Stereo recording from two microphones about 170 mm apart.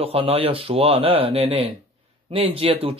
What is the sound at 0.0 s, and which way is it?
Speech, 35° right (ahead or behind).